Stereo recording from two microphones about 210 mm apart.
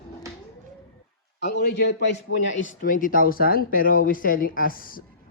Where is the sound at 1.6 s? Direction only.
50° left (ahead or behind).